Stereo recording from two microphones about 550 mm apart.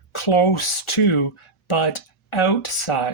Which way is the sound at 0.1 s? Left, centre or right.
Left.